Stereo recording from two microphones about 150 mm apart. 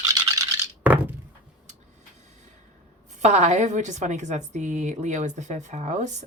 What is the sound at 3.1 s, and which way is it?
A woman's voice, 50° right (ahead or behind).